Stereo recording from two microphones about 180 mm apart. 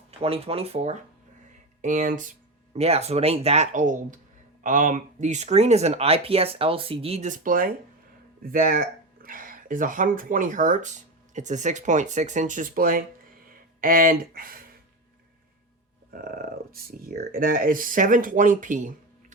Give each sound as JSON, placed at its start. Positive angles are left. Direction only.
{"t": 0.2, "sound": "speech", "side_deg": -35}
{"t": 2.7, "sound": "speech", "side_deg": -35}
{"t": 16.1, "sound": "speech", "side_deg": -55}